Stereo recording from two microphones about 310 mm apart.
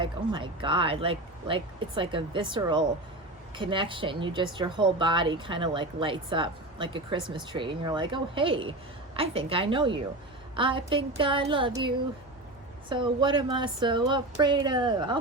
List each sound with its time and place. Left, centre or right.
0.0 s speech: centre